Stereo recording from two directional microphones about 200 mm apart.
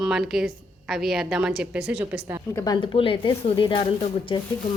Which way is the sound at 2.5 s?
20° left (ahead or behind).